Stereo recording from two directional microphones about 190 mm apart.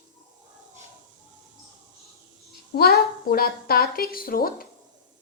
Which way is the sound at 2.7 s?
55° left (ahead or behind).